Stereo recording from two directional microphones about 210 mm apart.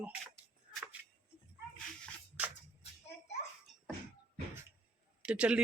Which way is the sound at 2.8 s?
30° left (ahead or behind).